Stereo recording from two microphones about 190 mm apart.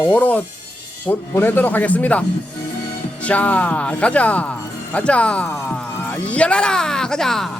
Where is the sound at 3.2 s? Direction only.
5° left (ahead or behind).